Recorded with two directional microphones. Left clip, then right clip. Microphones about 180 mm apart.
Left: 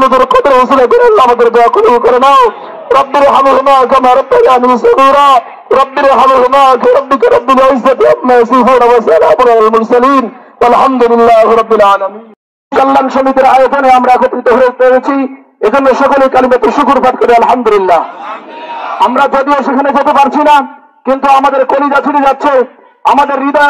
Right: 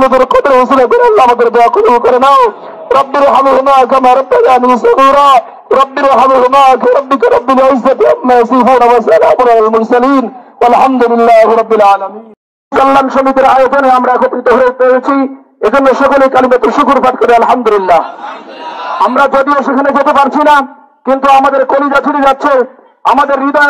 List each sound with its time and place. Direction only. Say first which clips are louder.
0.0 s a man's voice: left 1 dB; 30° left (ahead or behind)
19.1 s a man's voice: right 3 dB; 45° left (ahead or behind)